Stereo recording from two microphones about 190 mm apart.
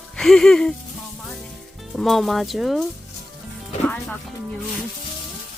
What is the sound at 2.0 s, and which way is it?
Speech, centre (ahead or behind).